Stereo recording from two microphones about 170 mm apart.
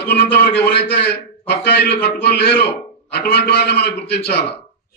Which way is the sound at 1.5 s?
70° left (ahead or behind).